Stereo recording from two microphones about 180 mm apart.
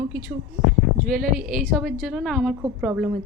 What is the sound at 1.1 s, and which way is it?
Speech, 50° right (ahead or behind).